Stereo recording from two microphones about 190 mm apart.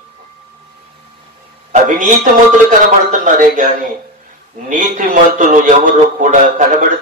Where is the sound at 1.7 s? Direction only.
40° right (ahead or behind).